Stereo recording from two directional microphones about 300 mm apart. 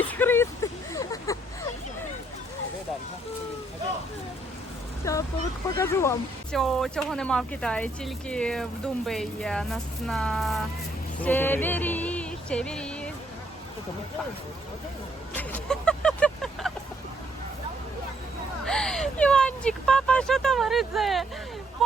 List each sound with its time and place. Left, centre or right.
0.0 s a sound: centre
5.0 s vehicle: centre
5.6 s speech: centre
11.2 s music: centre
15.4 s vehicle: centre
18.6 s a sound: centre
21.8 s speech: centre